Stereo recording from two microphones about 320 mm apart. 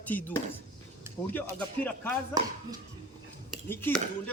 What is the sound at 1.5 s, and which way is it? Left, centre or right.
Speech, centre.